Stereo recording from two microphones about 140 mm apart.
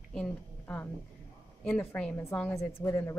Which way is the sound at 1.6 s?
5° left (ahead or behind).